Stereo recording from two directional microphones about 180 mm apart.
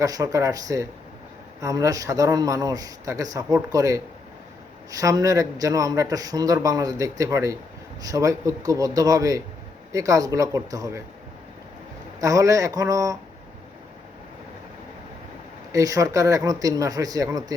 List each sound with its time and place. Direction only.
0.0 s a man's voice: 20° right (ahead or behind)
12.2 s speech: 20° right (ahead or behind)
15.7 s a man's voice: 20° right (ahead or behind)